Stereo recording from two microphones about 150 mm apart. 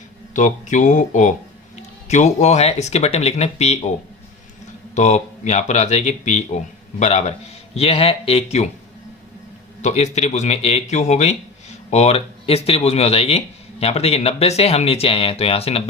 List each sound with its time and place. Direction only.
0.3 s speech: 55° left (ahead or behind)
4.9 s speech: 50° left (ahead or behind)
9.8 s speech: 45° left (ahead or behind)